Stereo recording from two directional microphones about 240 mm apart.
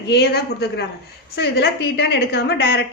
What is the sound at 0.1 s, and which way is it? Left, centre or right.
A woman's voice, left.